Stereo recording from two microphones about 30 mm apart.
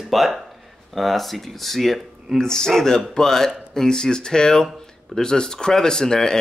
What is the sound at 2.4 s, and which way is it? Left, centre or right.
Speech, centre.